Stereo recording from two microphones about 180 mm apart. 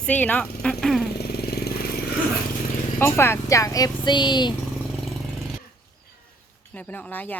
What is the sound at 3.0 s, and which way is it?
Speech, 15° left (ahead or behind).